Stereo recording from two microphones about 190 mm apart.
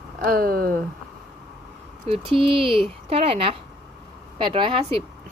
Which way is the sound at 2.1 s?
30° right (ahead or behind).